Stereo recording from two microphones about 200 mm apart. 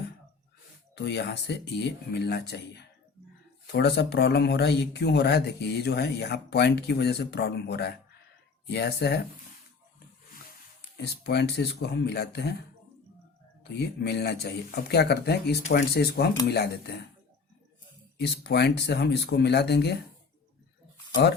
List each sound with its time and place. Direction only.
0.9 s speech: 55° left (ahead or behind)
10.9 s speech: 55° left (ahead or behind)
13.7 s speech: 55° left (ahead or behind)
18.2 s speech: 55° left (ahead or behind)